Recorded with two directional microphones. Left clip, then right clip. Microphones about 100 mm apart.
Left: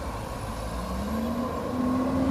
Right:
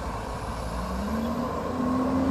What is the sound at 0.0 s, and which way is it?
Vehicle, 5° left (ahead or behind).